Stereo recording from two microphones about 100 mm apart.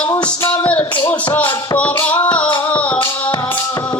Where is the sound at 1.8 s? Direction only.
15° left (ahead or behind).